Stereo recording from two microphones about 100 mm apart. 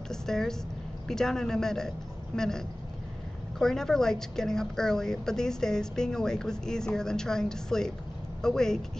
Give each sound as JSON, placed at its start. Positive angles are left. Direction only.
{"t": 0.1, "sound": "a woman's voice", "side_deg": 5}